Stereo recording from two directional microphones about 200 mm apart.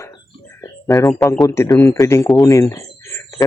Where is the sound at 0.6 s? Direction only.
15° left (ahead or behind).